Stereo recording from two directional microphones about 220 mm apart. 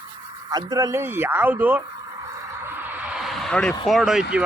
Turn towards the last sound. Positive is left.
turn(degrees=-5)  # may be behind; listen again after turning